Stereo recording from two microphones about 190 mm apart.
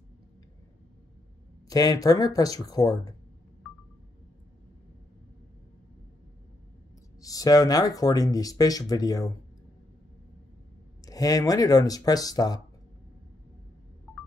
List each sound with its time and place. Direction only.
1.7 s speech: 20° left (ahead or behind)
3.6 s a sound: centre (ahead or behind)
7.2 s speech: 20° left (ahead or behind)
11.1 s speech: 20° left (ahead or behind)
14.1 s music: 5° right (ahead or behind)